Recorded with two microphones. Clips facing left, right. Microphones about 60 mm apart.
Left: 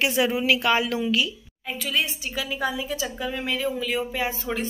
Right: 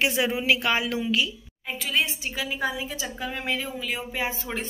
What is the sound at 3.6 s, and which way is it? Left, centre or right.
Speech, centre.